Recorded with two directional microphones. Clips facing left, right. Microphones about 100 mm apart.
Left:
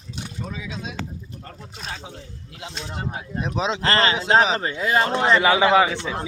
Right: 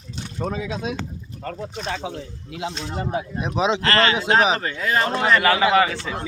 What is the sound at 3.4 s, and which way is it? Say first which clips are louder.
Speech: right 3 dB; 5° right (ahead or behind).